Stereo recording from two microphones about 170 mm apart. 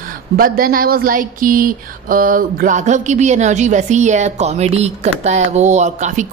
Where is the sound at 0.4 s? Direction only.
55° right (ahead or behind).